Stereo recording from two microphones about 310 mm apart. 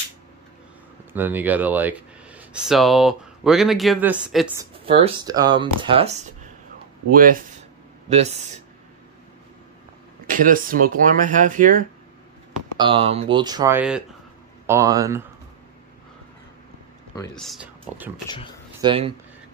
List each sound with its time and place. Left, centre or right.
1.1 s speech: centre
4.8 s speech: centre
10.2 s speech: right; by 15.2 s centre
17.1 s speech: centre
18.8 s speech: centre